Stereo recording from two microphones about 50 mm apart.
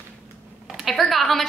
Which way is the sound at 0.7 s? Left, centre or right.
Centre.